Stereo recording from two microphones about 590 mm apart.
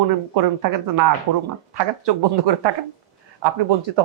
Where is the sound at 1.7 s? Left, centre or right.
Right.